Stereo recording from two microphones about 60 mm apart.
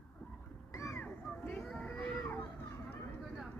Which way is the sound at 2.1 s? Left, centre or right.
Left.